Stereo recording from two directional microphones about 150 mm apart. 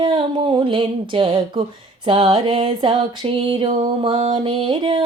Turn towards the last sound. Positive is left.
turn(degrees=-35)  # may be behind; listen again after turning